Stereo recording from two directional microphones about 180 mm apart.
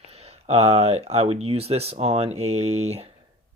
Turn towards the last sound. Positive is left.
turn(degrees=-35)  # may be behind; listen again after turning